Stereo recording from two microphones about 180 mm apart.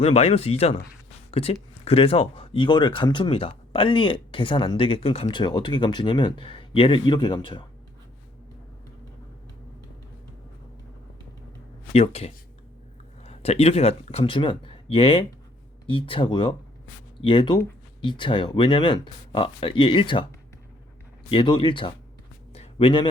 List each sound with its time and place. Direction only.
0.0 s speech: 35° left (ahead or behind)
11.9 s speech: 35° left (ahead or behind)
21.2 s speech: 30° left (ahead or behind)
22.5 s a sound: 30° left (ahead or behind)